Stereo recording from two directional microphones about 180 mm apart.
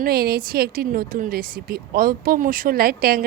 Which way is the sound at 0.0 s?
60° right (ahead or behind).